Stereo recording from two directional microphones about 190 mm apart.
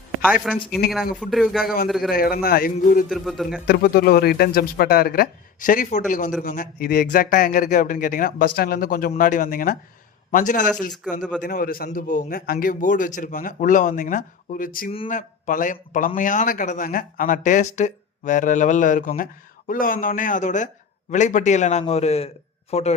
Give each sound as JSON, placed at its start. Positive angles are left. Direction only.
{"t": 0.4, "sound": "speech", "side_deg": 0}
{"t": 1.6, "sound": "speech", "side_deg": 50}
{"t": 1.9, "sound": "speech", "side_deg": 0}
{"t": 2.1, "sound": "speech", "side_deg": 50}
{"t": 3.1, "sound": "speech", "side_deg": 0}
{"t": 3.7, "sound": "speech", "side_deg": 55}
{"t": 11.2, "sound": "speech", "side_deg": 5}
{"t": 11.4, "sound": "a man's voice", "side_deg": 50}